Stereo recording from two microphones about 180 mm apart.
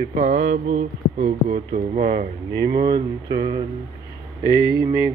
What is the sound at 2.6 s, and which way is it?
Speech, 25° right (ahead or behind).